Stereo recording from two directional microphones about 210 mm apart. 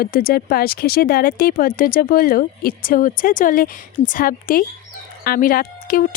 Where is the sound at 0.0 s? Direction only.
45° left (ahead or behind).